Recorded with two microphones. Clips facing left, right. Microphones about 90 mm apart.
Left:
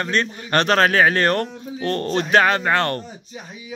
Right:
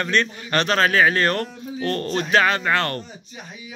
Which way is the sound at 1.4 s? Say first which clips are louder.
Left 1 dB; 30° left (ahead or behind).